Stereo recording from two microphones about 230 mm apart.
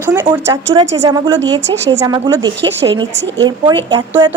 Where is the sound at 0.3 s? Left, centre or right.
Centre.